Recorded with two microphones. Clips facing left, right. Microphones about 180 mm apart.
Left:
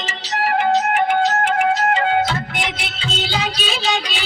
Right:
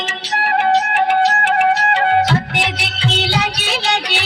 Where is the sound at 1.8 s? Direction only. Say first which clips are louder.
Right 2 dB; 70° right (ahead or behind).